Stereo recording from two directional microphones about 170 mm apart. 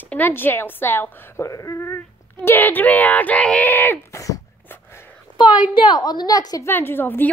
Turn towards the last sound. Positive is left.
turn(degrees=10)  # may be behind; listen again after turning